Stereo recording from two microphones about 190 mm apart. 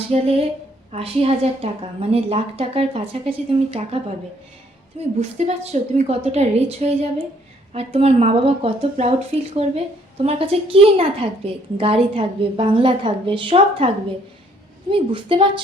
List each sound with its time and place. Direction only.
0.1 s a woman's voice: 30° right (ahead or behind)